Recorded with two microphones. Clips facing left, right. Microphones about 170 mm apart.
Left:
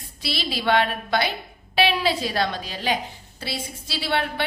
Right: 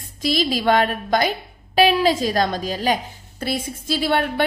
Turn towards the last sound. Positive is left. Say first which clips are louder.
# right 5 dB
turn(degrees=-45)  # may be behind; listen again after turning